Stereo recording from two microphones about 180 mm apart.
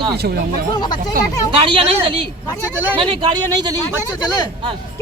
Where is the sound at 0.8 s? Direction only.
25° left (ahead or behind).